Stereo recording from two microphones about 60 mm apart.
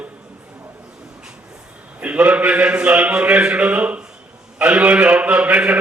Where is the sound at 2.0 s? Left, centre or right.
Right.